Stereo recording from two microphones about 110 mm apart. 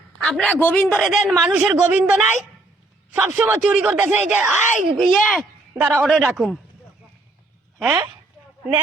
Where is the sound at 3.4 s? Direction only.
10° right (ahead or behind).